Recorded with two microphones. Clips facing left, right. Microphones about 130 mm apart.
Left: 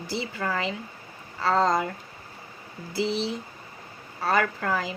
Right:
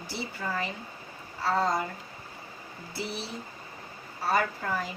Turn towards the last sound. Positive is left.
turn(degrees=90)